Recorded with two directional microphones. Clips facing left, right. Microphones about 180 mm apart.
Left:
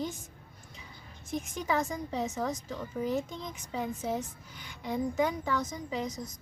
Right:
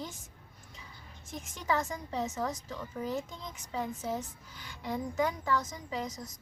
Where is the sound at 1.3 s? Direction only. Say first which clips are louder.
Left 2 dB; 15° left (ahead or behind).